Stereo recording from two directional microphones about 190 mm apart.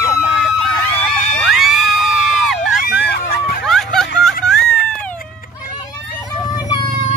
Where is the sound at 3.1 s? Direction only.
55° left (ahead or behind).